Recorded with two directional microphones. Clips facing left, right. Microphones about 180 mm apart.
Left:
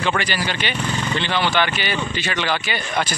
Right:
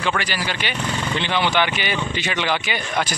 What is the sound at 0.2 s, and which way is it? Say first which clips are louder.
A man's voice: left 2 dB; 10° right (ahead or behind).